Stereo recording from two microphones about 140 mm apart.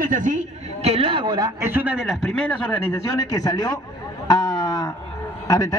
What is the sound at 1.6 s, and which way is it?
A man's voice, 10° right (ahead or behind).